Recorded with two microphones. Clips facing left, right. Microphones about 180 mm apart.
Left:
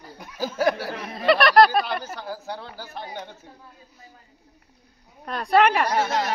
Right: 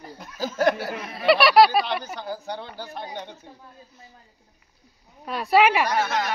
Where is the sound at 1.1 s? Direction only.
Centre (ahead or behind).